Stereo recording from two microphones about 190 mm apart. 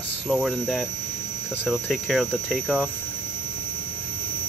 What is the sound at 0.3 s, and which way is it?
Hum, centre (ahead or behind).